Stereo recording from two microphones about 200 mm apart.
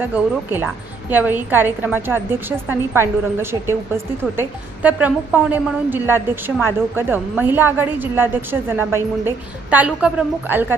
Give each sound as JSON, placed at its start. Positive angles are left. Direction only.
{"t": 0.0, "sound": "a woman's voice", "side_deg": -10}